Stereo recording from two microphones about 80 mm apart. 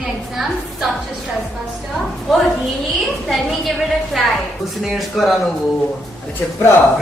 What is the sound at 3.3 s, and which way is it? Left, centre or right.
Speech, centre.